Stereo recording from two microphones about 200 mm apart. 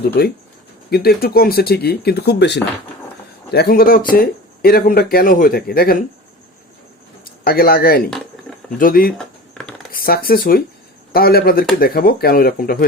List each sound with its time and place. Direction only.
0.2 s speech: 50° left (ahead or behind)
7.4 s speech: 50° left (ahead or behind)